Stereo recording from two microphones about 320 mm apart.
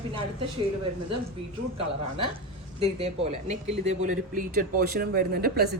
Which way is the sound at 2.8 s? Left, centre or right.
Centre.